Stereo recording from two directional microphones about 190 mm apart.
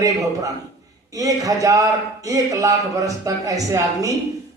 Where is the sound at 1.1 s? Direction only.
15° right (ahead or behind).